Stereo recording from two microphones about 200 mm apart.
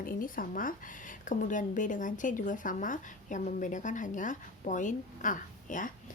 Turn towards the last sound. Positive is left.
turn(degrees=40)  # may be behind; listen again after turning